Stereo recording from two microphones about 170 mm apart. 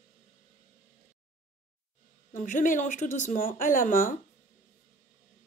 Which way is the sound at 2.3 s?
50° left (ahead or behind).